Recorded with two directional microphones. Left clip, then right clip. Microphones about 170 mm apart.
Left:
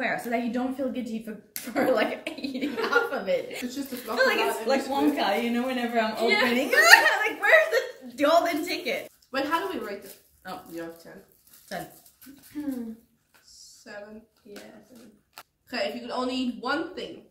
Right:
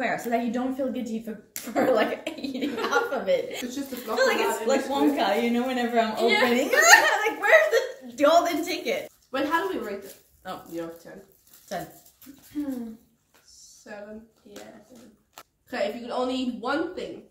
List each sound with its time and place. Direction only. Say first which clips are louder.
0.0 s a woman's voice: right 2 dB; 5° left (ahead or behind)
9.3 s speech: right 1 dB; 20° left (ahead or behind)
10.4 s a woman's voice: right 2 dB; centre (ahead or behind)
11.1 s a woman's voice: right 2 dB; 20° left (ahead or behind)
11.7 s a woman's voice: right 2 dB; centre (ahead or behind)
13.9 s a woman's voice: right 1 dB; 20° left (ahead or behind)
14.5 s speech: left 1 dB; 15° right (ahead or behind)
15.7 s a woman's voice: right 2 dB; 20° left (ahead or behind)